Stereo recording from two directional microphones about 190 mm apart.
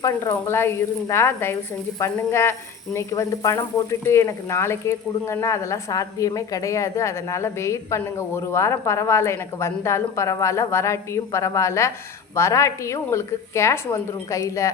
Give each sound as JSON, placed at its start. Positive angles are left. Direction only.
{"t": 0.0, "sound": "speech", "side_deg": 15}